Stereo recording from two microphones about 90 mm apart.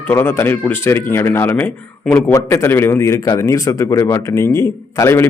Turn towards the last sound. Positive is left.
turn(degrees=35)  # may be behind; listen again after turning